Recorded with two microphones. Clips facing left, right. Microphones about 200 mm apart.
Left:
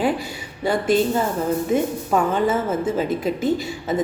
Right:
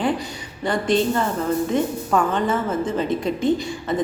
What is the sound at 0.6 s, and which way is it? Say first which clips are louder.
A woman's voice: left 1 dB; 5° left (ahead or behind).